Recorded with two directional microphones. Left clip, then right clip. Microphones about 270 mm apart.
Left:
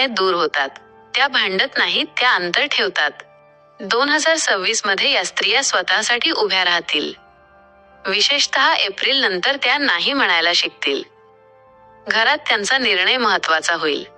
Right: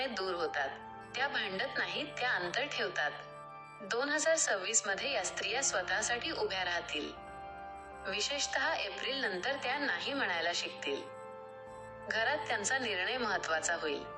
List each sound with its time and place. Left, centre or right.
0.0 s a woman's voice: left
8.3 s a woman's voice: left
12.1 s a woman's voice: left